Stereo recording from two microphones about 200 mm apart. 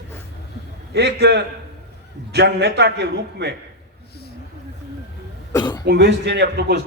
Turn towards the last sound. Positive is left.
turn(degrees=-55)  # may be behind; listen again after turning